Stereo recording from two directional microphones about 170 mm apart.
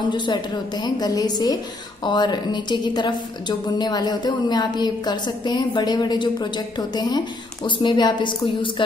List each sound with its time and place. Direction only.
0.1 s a woman's voice: 25° left (ahead or behind)